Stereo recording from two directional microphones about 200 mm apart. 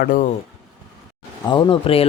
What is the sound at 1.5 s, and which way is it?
Speech, 25° left (ahead or behind).